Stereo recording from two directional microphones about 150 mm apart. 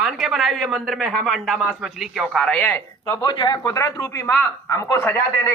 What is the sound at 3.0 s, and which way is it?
Speech, 25° left (ahead or behind).